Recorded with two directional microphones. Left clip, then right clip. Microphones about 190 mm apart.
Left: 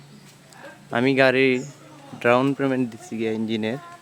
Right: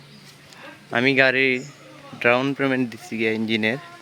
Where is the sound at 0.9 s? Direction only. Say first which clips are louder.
Right 1 dB; 15° left (ahead or behind); by 3.8 s centre (ahead or behind).